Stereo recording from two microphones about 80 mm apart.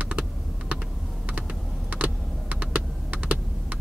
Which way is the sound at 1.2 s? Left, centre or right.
Centre.